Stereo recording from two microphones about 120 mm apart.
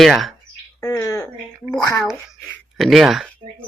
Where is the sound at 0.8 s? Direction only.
25° left (ahead or behind).